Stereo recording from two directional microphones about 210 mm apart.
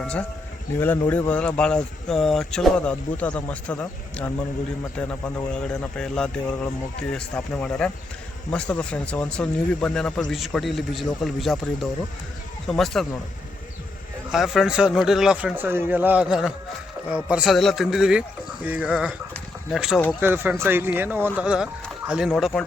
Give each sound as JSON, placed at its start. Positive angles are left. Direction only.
{"t": 0.0, "sound": "speech", "side_deg": 5}
{"t": 14.3, "sound": "speech", "side_deg": 0}
{"t": 19.3, "sound": "a sound", "side_deg": 0}
{"t": 20.2, "sound": "speech", "side_deg": -10}